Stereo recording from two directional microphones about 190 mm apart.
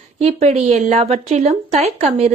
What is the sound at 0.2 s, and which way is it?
Speech, 35° right (ahead or behind).